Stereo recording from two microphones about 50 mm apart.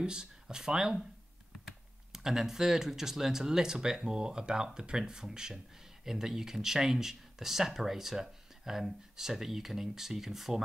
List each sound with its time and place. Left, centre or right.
0.0 s speech: centre
2.1 s speech: centre